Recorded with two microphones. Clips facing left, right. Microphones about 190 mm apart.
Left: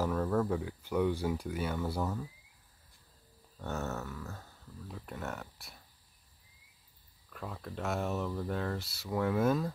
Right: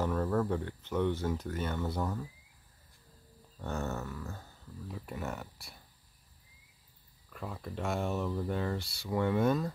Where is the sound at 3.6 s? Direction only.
5° left (ahead or behind).